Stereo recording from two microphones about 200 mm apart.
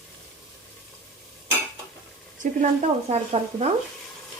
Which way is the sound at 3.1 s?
35° right (ahead or behind).